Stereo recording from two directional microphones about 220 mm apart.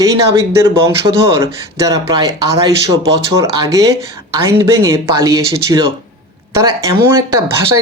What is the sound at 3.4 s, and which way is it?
Speech, 15° right (ahead or behind).